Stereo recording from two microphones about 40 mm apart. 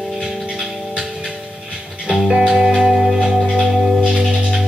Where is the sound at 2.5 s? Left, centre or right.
Centre.